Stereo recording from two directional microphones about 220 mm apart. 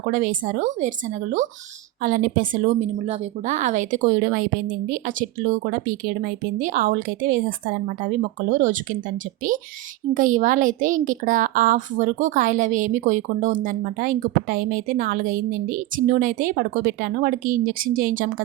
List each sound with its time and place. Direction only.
0.0 s a woman's voice: 35° right (ahead or behind)
10.2 s a woman's voice: 35° right (ahead or behind)